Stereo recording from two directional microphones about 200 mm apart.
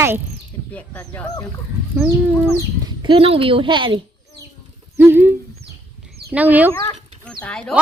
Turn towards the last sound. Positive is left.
turn(degrees=5)  # may be behind; listen again after turning